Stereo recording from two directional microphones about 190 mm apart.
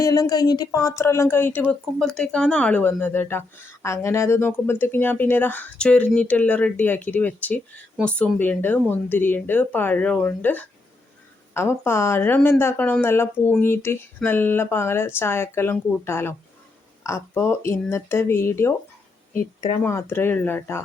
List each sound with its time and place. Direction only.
0.0 s speech: 20° left (ahead or behind)
19.8 s speech: 15° left (ahead or behind)